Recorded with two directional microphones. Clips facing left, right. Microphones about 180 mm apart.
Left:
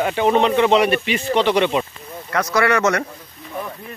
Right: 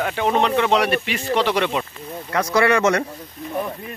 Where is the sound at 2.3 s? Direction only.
25° right (ahead or behind).